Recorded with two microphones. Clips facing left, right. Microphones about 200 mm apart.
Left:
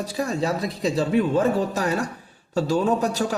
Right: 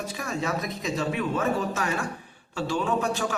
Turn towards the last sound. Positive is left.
turn(degrees=40)  # may be behind; listen again after turning